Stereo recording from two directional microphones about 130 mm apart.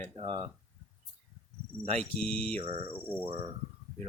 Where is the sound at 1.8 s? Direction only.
55° right (ahead or behind).